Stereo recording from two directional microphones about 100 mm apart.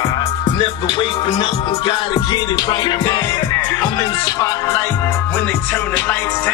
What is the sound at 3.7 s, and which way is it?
Music, 40° left (ahead or behind).